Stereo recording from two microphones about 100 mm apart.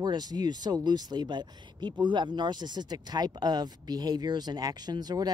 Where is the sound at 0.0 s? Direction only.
45° right (ahead or behind).